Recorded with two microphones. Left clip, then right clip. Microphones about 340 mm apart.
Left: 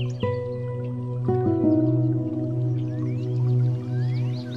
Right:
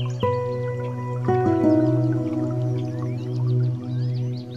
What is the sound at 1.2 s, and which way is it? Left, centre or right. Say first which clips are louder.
Music: right 3 dB; right.